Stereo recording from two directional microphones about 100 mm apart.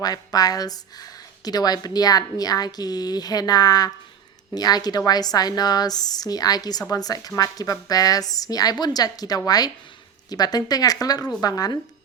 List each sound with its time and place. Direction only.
0.0 s speech: 40° left (ahead or behind)